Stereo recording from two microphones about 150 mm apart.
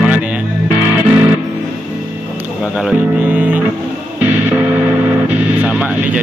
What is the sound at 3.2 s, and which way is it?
Music, 10° right (ahead or behind).